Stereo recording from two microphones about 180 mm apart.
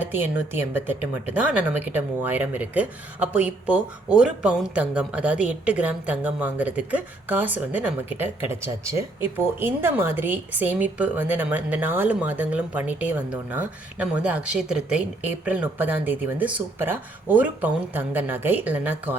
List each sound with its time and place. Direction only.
0.0 s speech: 10° right (ahead or behind)